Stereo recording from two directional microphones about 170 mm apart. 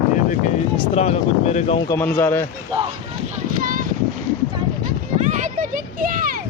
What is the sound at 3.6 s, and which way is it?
Speech, 50° right (ahead or behind).